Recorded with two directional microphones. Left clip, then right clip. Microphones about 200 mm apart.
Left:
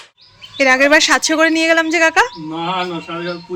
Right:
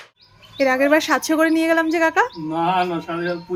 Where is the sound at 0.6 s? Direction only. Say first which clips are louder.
Left 6 dB; 5° left (ahead or behind).